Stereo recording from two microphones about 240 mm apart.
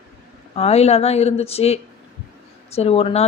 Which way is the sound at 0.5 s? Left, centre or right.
Left.